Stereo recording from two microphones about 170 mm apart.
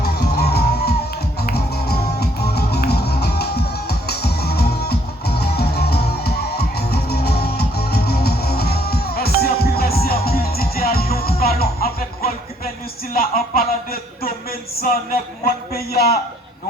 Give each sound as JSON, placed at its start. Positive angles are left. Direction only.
{"t": 0.0, "sound": "music", "side_deg": 70}
{"t": 13.1, "sound": "a sound", "side_deg": 60}
{"t": 14.8, "sound": "speech", "side_deg": 60}